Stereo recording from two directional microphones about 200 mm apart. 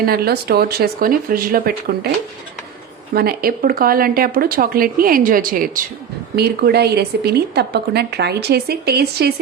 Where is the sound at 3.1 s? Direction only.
50° right (ahead or behind).